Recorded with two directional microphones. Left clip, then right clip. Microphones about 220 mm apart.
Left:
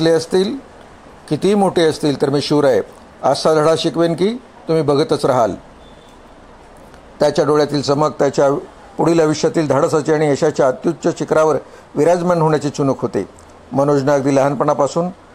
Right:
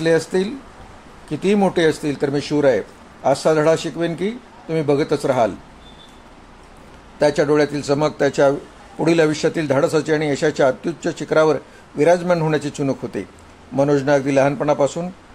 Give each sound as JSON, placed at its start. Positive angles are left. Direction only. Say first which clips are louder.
{"t": 0.0, "sound": "speech", "louder": "left 3 dB", "side_deg": 30}
{"t": 7.2, "sound": "a man's voice", "louder": "left 2 dB", "side_deg": 25}